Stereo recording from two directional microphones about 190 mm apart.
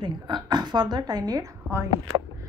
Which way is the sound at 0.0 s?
20° right (ahead or behind).